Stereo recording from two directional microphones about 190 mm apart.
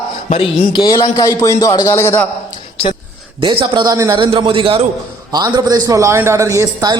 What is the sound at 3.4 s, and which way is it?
A man's voice, 25° right (ahead or behind).